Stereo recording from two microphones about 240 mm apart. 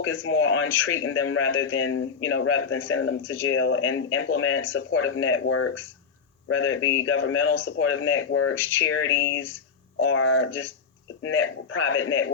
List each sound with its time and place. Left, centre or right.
0.0 s speech: left